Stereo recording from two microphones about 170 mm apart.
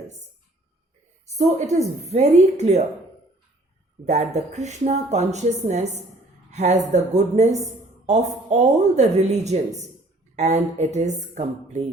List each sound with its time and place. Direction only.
1.4 s a woman's voice: 40° right (ahead or behind)
4.0 s a woman's voice: 40° right (ahead or behind)